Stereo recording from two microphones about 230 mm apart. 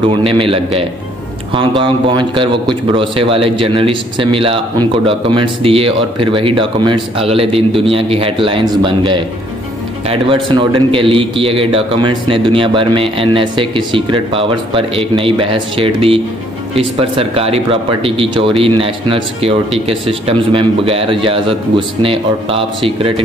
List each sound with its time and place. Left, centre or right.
0.1 s speech: right